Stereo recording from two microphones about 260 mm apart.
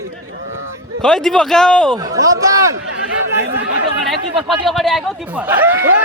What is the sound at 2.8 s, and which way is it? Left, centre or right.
Chatter, right.